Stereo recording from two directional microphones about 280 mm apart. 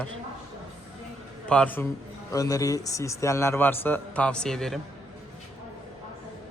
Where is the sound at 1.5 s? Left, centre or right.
Centre.